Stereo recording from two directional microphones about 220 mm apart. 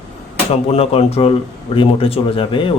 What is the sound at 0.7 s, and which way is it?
Speech, 30° left (ahead or behind).